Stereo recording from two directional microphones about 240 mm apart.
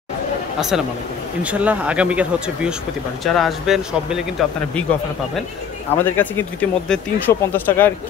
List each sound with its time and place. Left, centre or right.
0.6 s speech: centre
6.0 s speech: centre